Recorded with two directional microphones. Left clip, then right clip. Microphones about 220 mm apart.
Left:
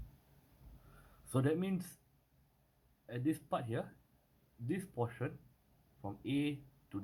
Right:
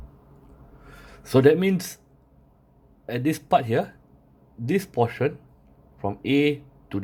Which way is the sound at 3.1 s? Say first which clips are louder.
Right 17 dB; 25° right (ahead or behind).